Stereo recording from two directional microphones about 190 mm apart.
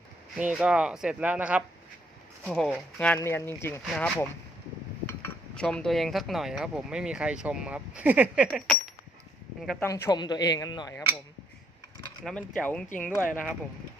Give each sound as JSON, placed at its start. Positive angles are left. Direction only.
{"t": 0.3, "sound": "speech", "side_deg": -5}
{"t": 5.5, "sound": "speech", "side_deg": 5}
{"t": 9.8, "sound": "speech", "side_deg": 15}
{"t": 12.2, "sound": "speech", "side_deg": 5}